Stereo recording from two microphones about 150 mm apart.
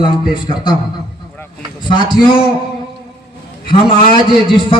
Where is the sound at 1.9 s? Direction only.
30° left (ahead or behind).